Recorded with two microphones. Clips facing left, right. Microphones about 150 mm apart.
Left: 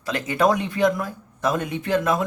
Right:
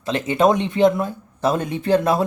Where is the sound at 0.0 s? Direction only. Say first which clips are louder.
Right 3 dB; 25° right (ahead or behind).